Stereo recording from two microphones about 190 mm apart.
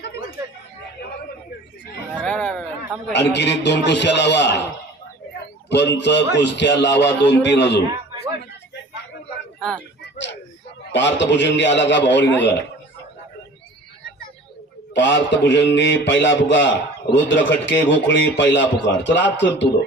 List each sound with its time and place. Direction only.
2.2 s a sound: 5° left (ahead or behind)
3.1 s a man's voice: 65° left (ahead or behind)
5.6 s a man's voice: 65° left (ahead or behind)
9.6 s a sound: 5° left (ahead or behind)
10.9 s a man's voice: 70° left (ahead or behind)
14.9 s a man's voice: 70° left (ahead or behind)